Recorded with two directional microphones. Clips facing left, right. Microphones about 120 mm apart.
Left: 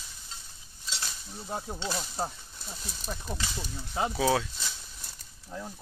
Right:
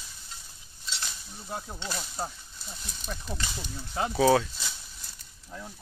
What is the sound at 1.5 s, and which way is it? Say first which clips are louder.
Speech: left 3 dB; 25° left (ahead or behind).